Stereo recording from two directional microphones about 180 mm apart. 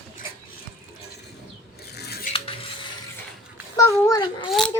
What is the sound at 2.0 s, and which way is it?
Scissors, 65° left (ahead or behind).